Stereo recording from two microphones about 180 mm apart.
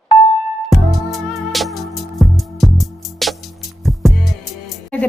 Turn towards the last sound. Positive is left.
turn(degrees=5)  # may be behind; listen again after turning